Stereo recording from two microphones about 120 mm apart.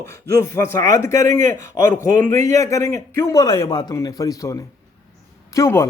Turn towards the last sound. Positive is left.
turn(degrees=25)  # may be behind; listen again after turning